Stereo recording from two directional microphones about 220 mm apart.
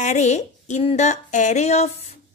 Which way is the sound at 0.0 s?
30° left (ahead or behind).